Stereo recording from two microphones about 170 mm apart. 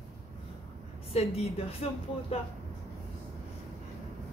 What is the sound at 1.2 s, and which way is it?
Speech, 40° left (ahead or behind).